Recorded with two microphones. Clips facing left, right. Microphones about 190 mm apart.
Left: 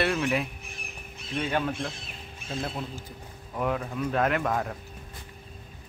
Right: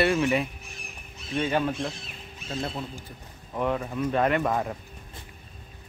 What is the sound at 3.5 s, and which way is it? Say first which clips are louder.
Speech: right 2 dB; centre (ahead or behind).